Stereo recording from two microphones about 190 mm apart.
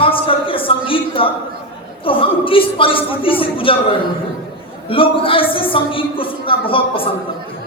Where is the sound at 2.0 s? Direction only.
30° left (ahead or behind).